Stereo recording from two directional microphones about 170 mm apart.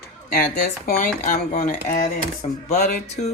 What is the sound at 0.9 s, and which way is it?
Speech, 55° left (ahead or behind).